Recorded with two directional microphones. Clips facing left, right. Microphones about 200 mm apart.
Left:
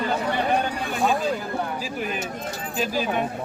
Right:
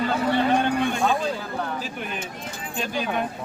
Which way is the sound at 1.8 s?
5° left (ahead or behind).